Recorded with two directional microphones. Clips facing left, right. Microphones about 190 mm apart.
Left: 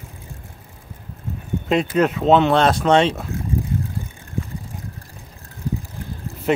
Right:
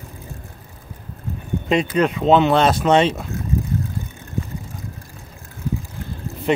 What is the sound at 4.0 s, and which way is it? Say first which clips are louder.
Vehicle: right 1 dB; 30° left (ahead or behind).